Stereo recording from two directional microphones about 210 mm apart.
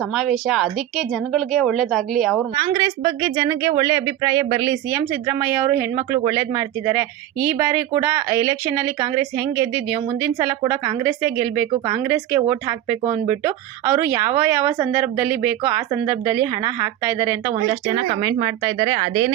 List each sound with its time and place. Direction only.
0.1 s speech: centre (ahead or behind)
2.7 s speech: 20° right (ahead or behind)